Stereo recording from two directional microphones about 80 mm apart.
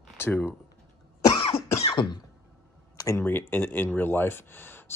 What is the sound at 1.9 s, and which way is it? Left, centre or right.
Cough, left.